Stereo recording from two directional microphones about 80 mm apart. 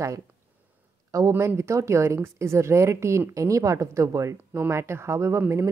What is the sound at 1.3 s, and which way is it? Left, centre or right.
A woman's voice, right.